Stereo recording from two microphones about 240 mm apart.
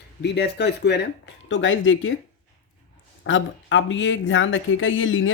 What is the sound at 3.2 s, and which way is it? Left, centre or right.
Speech, left.